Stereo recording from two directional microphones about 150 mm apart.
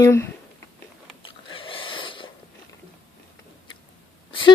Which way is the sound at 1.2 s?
35° left (ahead or behind).